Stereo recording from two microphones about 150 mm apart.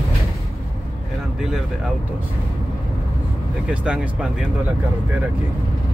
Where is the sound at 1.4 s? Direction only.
5° right (ahead or behind).